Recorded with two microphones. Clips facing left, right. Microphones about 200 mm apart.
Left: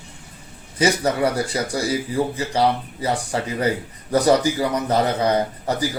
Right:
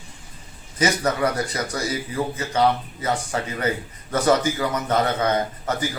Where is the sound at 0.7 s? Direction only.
30° left (ahead or behind).